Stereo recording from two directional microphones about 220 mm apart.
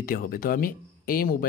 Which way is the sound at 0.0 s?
40° left (ahead or behind).